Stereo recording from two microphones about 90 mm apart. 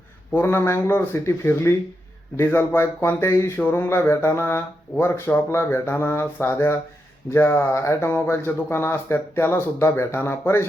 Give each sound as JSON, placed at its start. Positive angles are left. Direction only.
{"t": 0.3, "sound": "speech", "side_deg": 25}